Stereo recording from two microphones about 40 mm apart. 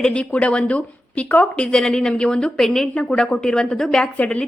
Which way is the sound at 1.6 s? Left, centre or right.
Centre.